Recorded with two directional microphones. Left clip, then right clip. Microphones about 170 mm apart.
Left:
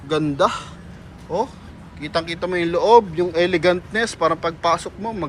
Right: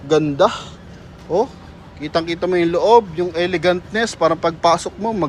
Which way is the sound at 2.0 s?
30° right (ahead or behind).